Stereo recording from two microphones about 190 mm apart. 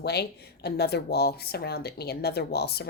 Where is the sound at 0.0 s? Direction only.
60° left (ahead or behind).